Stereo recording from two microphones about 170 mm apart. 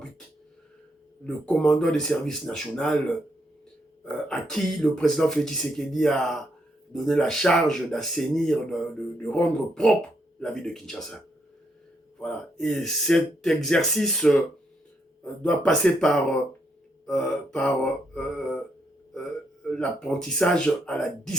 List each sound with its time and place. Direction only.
1.2 s speech: 5° left (ahead or behind)
4.0 s speech: 5° left (ahead or behind)
12.2 s speech: 5° left (ahead or behind)
19.6 s speech: 5° left (ahead or behind)